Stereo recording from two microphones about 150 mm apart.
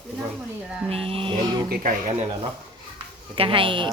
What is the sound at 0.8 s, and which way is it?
Speech, 40° right (ahead or behind).